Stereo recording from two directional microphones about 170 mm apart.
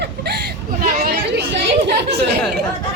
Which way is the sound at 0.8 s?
55° right (ahead or behind).